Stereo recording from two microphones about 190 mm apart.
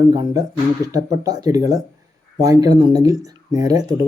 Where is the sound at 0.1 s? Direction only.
20° right (ahead or behind).